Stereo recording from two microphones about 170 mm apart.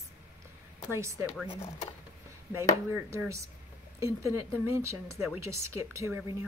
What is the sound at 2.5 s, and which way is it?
A woman's voice, 15° right (ahead or behind).